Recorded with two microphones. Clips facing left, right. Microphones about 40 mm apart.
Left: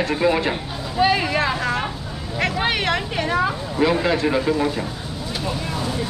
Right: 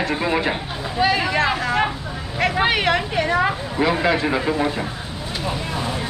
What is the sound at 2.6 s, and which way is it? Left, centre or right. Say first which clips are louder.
Speech: right 5 dB; centre.